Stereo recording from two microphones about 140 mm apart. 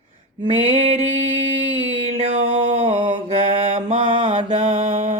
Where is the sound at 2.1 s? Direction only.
50° right (ahead or behind).